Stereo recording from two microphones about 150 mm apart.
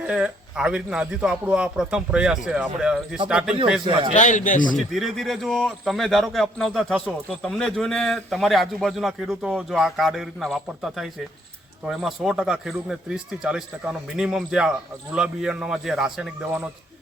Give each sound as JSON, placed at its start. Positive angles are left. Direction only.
{"t": 0.1, "sound": "a man's voice", "side_deg": -5}
{"t": 4.1, "sound": "a man's voice", "side_deg": 55}
{"t": 4.9, "sound": "a man's voice", "side_deg": 0}